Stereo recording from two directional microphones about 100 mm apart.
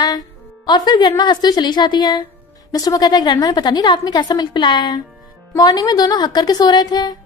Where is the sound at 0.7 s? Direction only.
45° left (ahead or behind).